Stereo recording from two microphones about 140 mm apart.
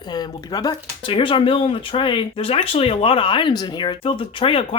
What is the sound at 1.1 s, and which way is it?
Speech, 40° left (ahead or behind).